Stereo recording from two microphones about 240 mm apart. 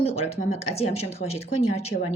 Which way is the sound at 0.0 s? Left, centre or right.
Left.